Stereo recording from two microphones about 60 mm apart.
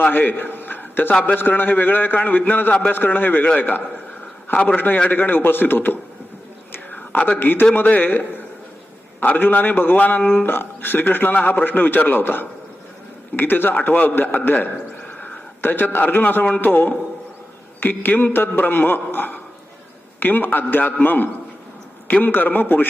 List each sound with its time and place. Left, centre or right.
0.0 s a man's voice: left
4.5 s a man's voice: centre
5.1 s a man's voice: left
6.7 s whispering: left
7.2 s a man's voice: left